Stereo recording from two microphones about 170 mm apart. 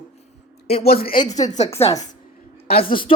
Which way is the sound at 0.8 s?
60° left (ahead or behind).